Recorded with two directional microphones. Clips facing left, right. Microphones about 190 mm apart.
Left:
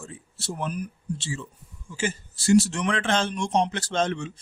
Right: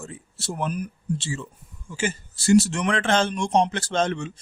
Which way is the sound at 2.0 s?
50° right (ahead or behind).